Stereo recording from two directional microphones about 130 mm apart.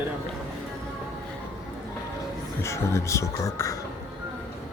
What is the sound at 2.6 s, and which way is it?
Speech, 20° left (ahead or behind).